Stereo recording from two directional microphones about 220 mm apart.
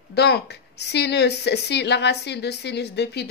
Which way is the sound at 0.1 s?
50° left (ahead or behind).